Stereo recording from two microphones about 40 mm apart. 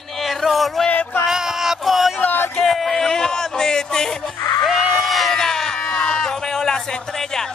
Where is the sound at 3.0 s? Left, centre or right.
Centre.